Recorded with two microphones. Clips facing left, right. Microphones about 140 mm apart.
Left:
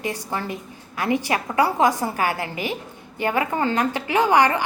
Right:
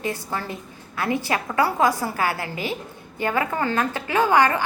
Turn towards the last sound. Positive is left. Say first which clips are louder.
# left 1 dB
turn(degrees=20)  # may be behind; listen again after turning